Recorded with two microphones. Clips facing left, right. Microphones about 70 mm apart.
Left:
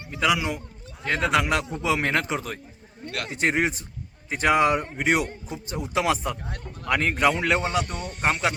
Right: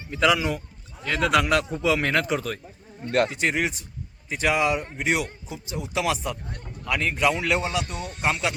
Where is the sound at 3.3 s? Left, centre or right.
Left.